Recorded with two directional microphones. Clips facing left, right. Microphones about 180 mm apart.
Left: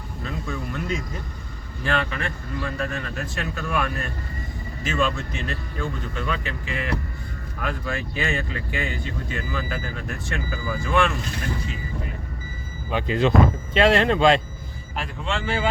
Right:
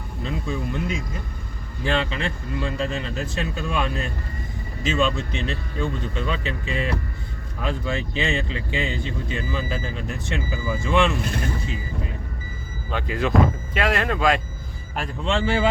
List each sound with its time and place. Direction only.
0.3 s speech: 20° right (ahead or behind)
1.8 s speech: 20° right (ahead or behind)
12.9 s speech: 20° left (ahead or behind)
15.3 s speech: 25° right (ahead or behind)